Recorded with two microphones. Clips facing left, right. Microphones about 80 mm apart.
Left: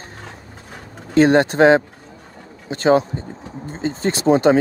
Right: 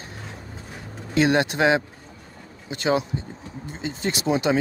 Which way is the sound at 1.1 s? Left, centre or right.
Left.